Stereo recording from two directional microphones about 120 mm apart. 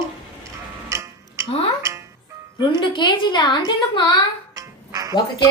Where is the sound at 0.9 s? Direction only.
25° right (ahead or behind).